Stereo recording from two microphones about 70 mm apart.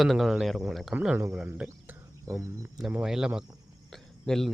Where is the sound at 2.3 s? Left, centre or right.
Right.